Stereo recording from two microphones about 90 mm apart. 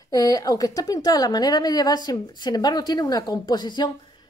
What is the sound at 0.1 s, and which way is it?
A woman's voice, 40° left (ahead or behind).